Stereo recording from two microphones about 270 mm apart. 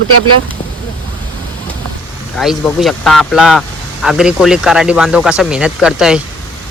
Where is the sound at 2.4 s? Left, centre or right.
Centre.